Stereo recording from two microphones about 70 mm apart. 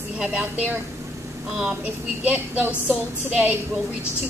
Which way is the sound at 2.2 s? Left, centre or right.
Right.